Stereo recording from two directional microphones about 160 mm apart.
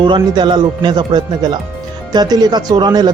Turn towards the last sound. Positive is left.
turn(degrees=-25)  # may be behind; listen again after turning